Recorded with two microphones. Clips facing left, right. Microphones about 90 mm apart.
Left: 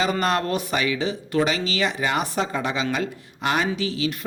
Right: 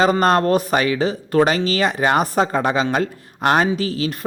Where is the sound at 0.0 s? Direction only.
40° right (ahead or behind).